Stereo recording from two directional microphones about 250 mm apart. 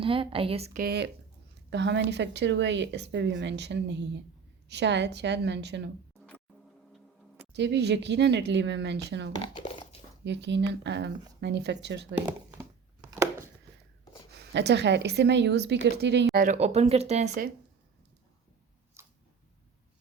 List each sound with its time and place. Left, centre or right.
0.0 s speech: right
7.5 s speech: right
9.3 s speech: centre
10.2 s speech: right
12.5 s a sound: centre
14.3 s speech: right
16.3 s speech: right
19.0 s a sound: centre